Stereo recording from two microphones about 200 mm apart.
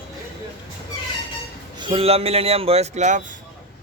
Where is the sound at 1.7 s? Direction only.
25° right (ahead or behind).